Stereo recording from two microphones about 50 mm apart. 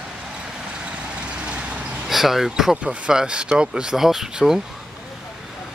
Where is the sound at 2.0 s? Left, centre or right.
Centre.